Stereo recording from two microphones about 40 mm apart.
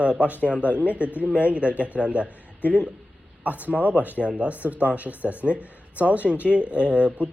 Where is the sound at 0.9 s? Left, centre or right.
Right.